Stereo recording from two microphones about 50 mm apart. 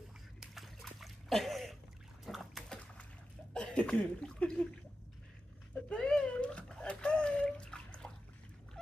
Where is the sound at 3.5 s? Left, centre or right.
Left.